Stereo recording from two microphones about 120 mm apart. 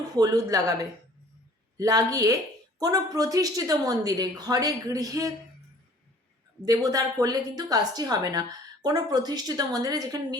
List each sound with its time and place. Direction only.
0.2 s a woman's voice: 30° right (ahead or behind)
6.7 s a woman's voice: 30° right (ahead or behind)